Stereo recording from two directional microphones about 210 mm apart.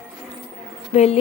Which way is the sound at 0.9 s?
30° left (ahead or behind).